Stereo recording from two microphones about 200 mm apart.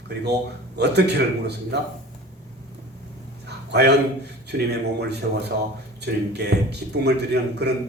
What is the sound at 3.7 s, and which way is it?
A man's voice, 55° right (ahead or behind).